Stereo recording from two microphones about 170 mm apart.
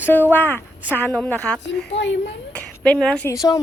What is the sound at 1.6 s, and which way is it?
Speech, 90° left.